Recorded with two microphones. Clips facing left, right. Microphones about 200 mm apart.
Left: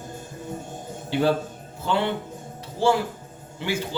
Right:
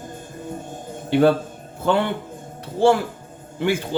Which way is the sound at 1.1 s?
55° right (ahead or behind).